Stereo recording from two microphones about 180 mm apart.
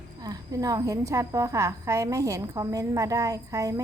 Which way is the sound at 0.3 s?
20° right (ahead or behind).